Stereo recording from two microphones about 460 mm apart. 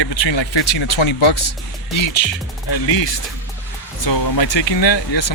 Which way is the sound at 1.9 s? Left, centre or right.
Left.